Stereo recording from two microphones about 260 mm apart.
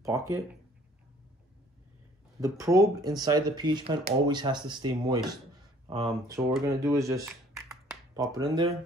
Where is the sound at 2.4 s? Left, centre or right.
Centre.